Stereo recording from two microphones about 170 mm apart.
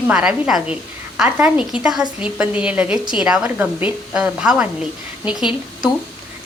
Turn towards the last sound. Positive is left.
turn(degrees=-5)  # may be behind; listen again after turning